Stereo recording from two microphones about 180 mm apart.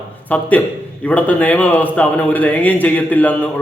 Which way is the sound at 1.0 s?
10° left (ahead or behind).